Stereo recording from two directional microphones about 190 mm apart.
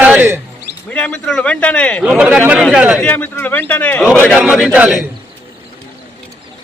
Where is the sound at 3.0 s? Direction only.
10° left (ahead or behind).